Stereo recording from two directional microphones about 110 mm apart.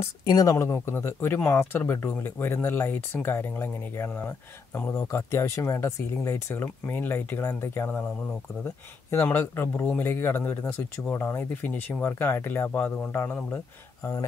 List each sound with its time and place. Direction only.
0.3 s speech: 35° left (ahead or behind)
9.1 s speech: 20° left (ahead or behind)